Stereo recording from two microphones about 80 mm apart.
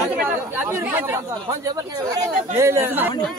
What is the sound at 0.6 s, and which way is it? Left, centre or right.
Speech, right.